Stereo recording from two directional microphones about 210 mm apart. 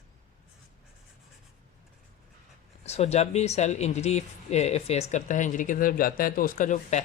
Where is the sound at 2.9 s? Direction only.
30° left (ahead or behind).